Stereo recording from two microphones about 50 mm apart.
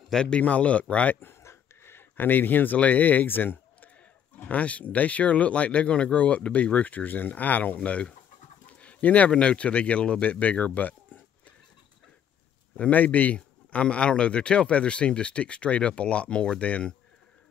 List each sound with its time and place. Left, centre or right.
0.1 s speech: centre
1.2 s a sound: left
4.4 s speech: left
8.6 s a sound: left
9.3 s speech: left
12.7 s speech: left